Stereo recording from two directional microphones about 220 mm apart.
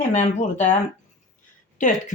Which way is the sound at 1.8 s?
35° left (ahead or behind).